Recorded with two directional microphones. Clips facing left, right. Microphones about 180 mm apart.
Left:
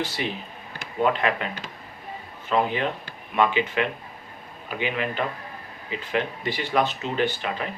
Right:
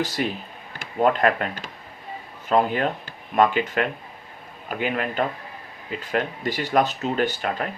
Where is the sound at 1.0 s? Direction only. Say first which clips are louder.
Right 3 dB; 45° right (ahead or behind).